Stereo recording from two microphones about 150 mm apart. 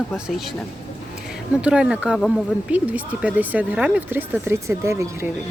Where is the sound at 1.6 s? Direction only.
5° right (ahead or behind).